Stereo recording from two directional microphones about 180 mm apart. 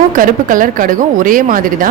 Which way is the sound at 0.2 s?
50° right (ahead or behind).